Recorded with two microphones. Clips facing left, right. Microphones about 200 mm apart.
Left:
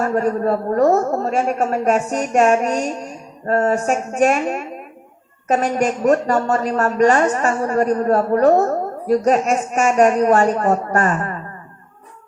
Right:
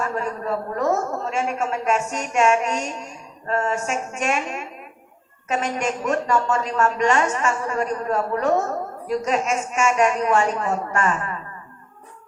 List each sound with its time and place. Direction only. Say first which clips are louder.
0.0 s a woman's voice: left 8 dB; 40° left (ahead or behind)